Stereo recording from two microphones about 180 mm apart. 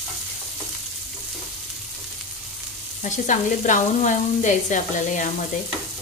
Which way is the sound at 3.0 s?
45° left (ahead or behind).